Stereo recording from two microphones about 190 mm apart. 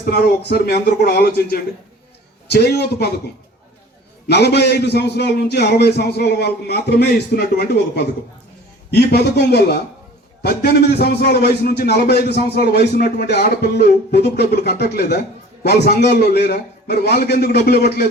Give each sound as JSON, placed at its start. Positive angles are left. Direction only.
{"t": 0.0, "sound": "a man's voice", "side_deg": 55}
{"t": 4.3, "sound": "a man's voice", "side_deg": 60}